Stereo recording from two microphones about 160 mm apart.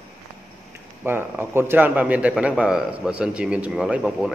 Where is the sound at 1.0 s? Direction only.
15° right (ahead or behind).